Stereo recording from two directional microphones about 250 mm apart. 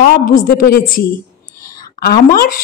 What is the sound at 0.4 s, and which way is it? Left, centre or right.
A woman's voice, left.